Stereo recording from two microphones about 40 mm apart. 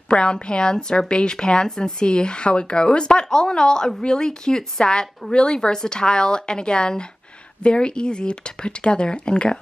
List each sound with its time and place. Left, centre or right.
0.1 s a woman's voice: left